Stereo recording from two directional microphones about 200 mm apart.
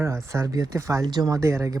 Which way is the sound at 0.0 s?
15° right (ahead or behind).